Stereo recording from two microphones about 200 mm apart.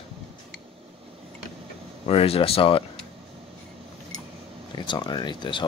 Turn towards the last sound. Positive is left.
turn(degrees=25)  # may be behind; listen again after turning